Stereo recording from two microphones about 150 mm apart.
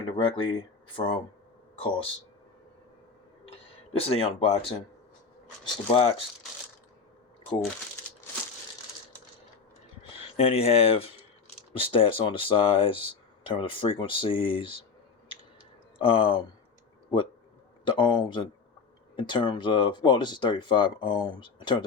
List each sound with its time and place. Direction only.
0.0 s speech: 35° left (ahead or behind)
1.8 s speech: 35° left (ahead or behind)
3.9 s speech: 40° left (ahead or behind)
10.2 s speech: 40° left (ahead or behind)
16.0 s speech: 35° left (ahead or behind)
17.8 s speech: 30° left (ahead or behind)